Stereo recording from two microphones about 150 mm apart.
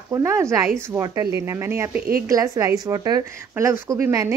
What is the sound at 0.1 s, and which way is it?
A woman's voice, 20° right (ahead or behind).